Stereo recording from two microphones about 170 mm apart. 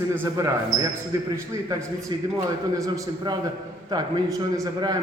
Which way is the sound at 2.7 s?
20° right (ahead or behind).